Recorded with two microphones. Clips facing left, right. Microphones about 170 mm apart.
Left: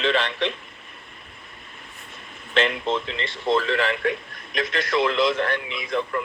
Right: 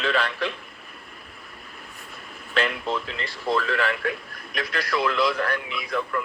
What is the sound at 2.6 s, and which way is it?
Speech, centre (ahead or behind).